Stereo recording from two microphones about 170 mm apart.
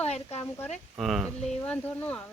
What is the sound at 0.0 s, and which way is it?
Speech, 40° left (ahead or behind).